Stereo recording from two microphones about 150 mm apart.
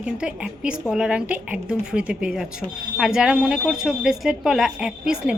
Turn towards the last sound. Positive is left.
turn(degrees=-5)  # may be behind; listen again after turning